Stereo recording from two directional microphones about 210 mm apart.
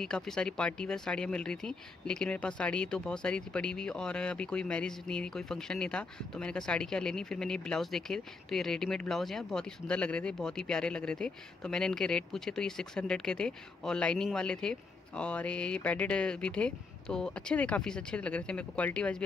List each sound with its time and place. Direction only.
0.0 s speech: centre (ahead or behind)